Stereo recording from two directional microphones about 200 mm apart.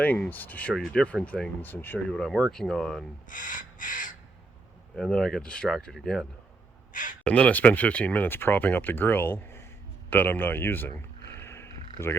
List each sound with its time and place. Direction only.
0.0 s speech: 10° left (ahead or behind)
3.2 s crow: 40° left (ahead or behind)
4.9 s speech: 5° left (ahead or behind)
6.9 s speech: 40° left (ahead or behind)
7.3 s speech: 5° left (ahead or behind)
10.1 s a sound: 10° left (ahead or behind)